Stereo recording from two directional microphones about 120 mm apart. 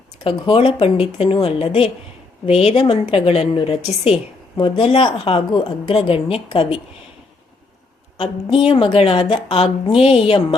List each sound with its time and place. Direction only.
0.3 s a woman's voice: 45° left (ahead or behind)
8.2 s a woman's voice: 50° left (ahead or behind)